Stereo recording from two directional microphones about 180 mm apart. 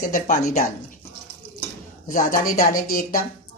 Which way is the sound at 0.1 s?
45° left (ahead or behind).